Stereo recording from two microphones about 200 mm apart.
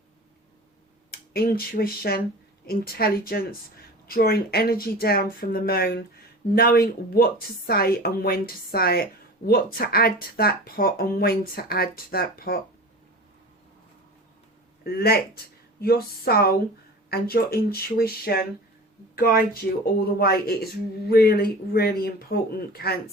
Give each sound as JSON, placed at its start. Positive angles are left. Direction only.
{"t": 1.1, "sound": "speech", "side_deg": 50}
{"t": 14.8, "sound": "speech", "side_deg": 50}